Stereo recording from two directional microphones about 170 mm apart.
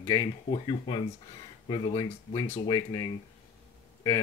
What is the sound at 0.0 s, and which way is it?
Speech, 25° left (ahead or behind).